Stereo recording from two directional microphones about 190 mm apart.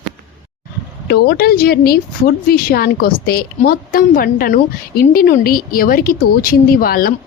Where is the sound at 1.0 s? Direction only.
55° left (ahead or behind).